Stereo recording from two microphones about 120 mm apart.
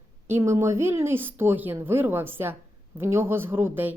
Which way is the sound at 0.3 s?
25° right (ahead or behind).